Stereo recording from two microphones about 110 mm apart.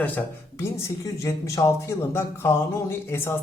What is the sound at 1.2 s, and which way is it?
Speech, 30° left (ahead or behind).